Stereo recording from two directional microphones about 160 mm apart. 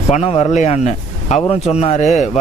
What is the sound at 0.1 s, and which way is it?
Speech, 40° left (ahead or behind).